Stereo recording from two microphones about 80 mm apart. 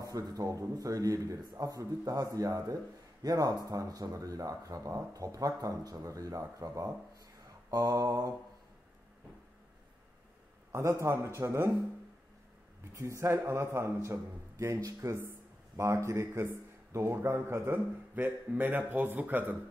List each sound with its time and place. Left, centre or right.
0.0 s speech: right
10.7 s a man's voice: right
12.9 s a man's voice: right